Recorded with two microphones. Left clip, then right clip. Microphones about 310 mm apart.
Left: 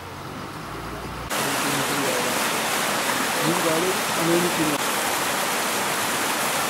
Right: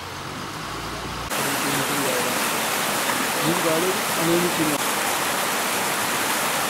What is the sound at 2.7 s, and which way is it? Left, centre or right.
Stream, centre.